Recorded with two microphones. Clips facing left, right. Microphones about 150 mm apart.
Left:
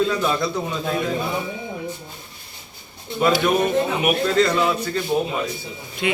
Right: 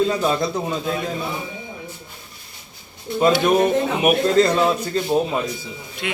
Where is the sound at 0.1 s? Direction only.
30° right (ahead or behind).